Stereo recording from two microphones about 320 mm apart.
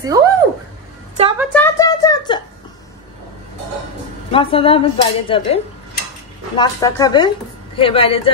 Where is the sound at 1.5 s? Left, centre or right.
Centre.